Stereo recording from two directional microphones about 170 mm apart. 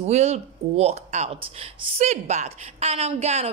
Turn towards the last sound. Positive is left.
turn(degrees=-40)  # may be behind; listen again after turning